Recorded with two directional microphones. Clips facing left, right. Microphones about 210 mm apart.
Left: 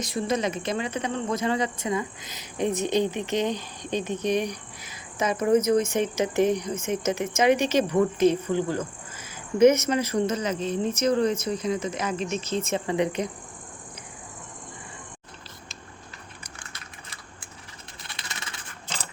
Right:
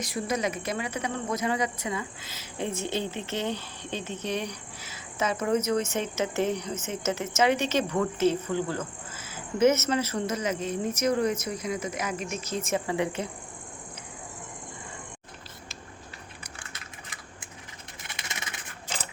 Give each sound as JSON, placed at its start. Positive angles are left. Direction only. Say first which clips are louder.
{"t": 0.0, "sound": "speech", "louder": "left 3 dB", "side_deg": 25}
{"t": 10.3, "sound": "speech", "louder": "left 2 dB", "side_deg": 30}
{"t": 18.0, "sound": "a sound", "louder": "right 1 dB", "side_deg": -20}